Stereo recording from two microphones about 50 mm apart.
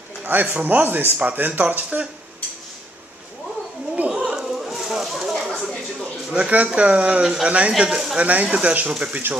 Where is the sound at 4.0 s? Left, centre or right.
Right.